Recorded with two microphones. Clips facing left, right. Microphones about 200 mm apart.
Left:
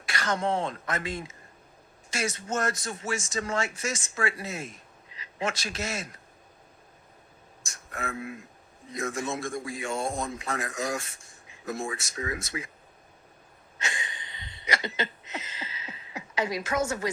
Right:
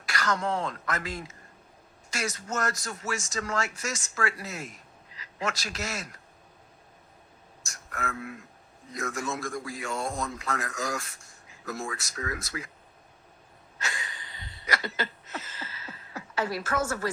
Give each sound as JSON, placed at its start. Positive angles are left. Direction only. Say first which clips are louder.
{"t": 0.1, "sound": "speech", "louder": "left 1 dB", "side_deg": 30}
{"t": 7.7, "sound": "speech", "louder": "even", "side_deg": 30}
{"t": 13.8, "sound": "a sound", "louder": "left 1 dB", "side_deg": 25}